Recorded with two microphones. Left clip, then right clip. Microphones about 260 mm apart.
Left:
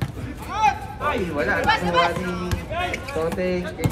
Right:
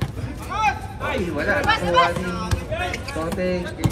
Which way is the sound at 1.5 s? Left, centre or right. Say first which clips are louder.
Right 1 dB; left.